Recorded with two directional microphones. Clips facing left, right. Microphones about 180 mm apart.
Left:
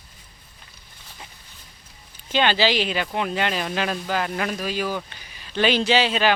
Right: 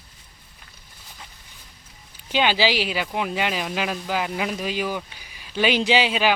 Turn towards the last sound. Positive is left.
turn(degrees=-10)  # may be behind; listen again after turning